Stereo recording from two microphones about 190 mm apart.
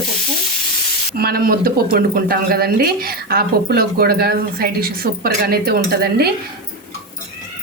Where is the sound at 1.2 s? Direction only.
50° right (ahead or behind).